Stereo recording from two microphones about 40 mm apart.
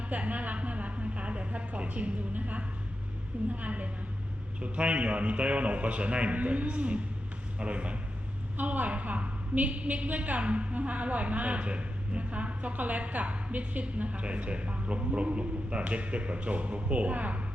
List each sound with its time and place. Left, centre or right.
0.1 s a woman's voice: right
8.5 s a woman's voice: right